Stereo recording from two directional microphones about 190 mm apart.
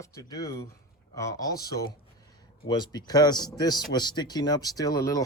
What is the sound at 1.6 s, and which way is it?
Speech, 55° left (ahead or behind).